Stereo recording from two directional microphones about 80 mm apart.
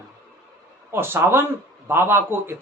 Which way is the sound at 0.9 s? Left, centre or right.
Right.